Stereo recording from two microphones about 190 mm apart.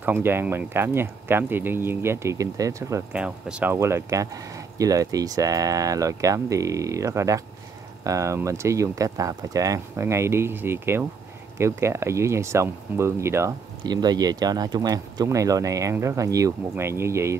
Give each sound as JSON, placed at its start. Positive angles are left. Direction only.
{"t": 0.0, "sound": "speech", "side_deg": -10}